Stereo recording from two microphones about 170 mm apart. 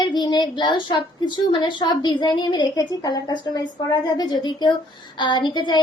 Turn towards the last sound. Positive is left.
turn(degrees=25)  # may be behind; listen again after turning